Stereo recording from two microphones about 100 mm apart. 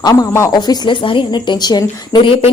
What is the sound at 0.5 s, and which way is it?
A woman's voice, 50° left (ahead or behind).